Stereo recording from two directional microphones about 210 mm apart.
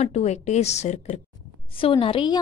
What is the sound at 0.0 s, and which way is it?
A woman's voice, 30° left (ahead or behind).